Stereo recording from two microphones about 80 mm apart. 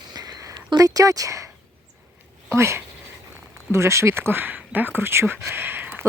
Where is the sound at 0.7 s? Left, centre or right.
Right.